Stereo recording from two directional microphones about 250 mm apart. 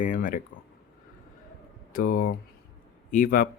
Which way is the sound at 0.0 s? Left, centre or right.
Left.